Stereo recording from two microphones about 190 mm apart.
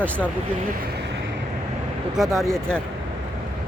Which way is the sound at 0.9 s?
65° right (ahead or behind).